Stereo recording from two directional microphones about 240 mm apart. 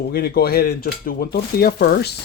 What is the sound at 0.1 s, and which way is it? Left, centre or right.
Speech, left.